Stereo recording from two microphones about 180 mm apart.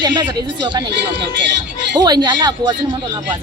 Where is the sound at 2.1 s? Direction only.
25° right (ahead or behind).